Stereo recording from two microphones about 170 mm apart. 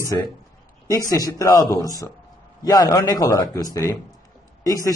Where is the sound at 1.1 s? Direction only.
20° left (ahead or behind).